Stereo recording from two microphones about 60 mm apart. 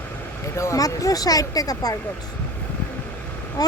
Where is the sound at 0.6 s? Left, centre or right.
Left.